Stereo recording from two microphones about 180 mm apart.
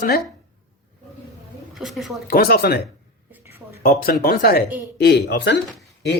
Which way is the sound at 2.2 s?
55° left (ahead or behind).